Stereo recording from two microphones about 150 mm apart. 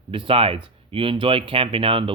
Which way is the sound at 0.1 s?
35° right (ahead or behind).